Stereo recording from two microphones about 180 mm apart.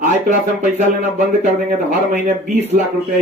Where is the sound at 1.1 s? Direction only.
45° right (ahead or behind).